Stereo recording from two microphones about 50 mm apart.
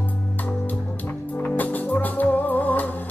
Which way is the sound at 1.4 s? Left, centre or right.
Left.